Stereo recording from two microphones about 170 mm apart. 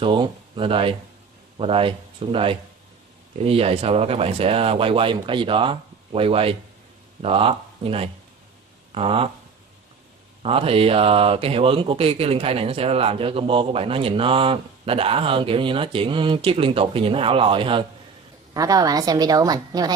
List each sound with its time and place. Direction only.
0.0 s speech: 30° right (ahead or behind)
10.4 s a woman's voice: 35° right (ahead or behind)